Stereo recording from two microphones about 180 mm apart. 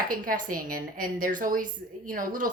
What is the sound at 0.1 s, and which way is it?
A woman's voice, 50° right (ahead or behind).